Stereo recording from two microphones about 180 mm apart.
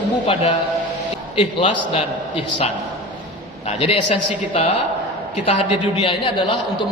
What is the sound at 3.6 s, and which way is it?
Speech, 30° left (ahead or behind).